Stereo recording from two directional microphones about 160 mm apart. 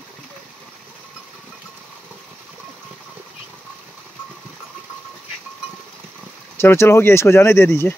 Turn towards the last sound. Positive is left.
turn(degrees=15)  # may be behind; listen again after turning